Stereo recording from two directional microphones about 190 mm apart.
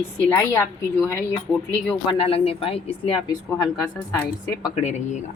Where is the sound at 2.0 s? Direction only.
30° left (ahead or behind).